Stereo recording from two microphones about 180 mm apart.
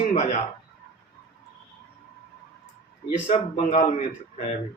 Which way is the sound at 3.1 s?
35° left (ahead or behind).